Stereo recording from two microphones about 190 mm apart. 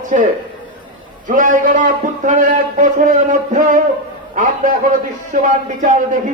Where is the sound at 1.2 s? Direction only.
45° right (ahead or behind).